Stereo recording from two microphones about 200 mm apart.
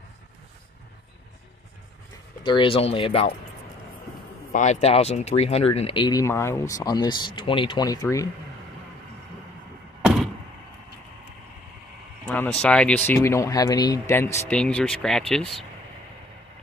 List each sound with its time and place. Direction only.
2.4 s speech: 25° left (ahead or behind)
4.5 s speech: 35° left (ahead or behind); by 8.3 s 15° left (ahead or behind)
10.0 s door: centre (ahead or behind)
12.6 s speech: 5° left (ahead or behind)